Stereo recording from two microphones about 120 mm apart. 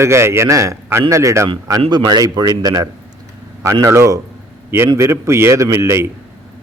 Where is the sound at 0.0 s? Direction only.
25° right (ahead or behind).